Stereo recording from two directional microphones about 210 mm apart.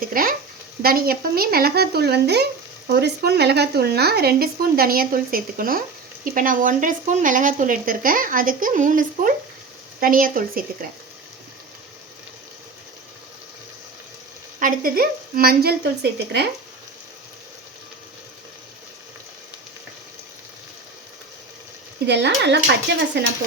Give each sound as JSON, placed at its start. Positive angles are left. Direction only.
{"t": 0.0, "sound": "speech", "side_deg": -45}
{"t": 14.6, "sound": "speech", "side_deg": -40}
{"t": 22.0, "sound": "speech", "side_deg": -55}